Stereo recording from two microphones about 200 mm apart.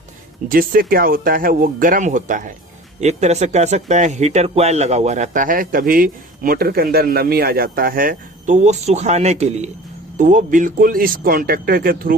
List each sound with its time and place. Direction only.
0.4 s speech: 45° right (ahead or behind)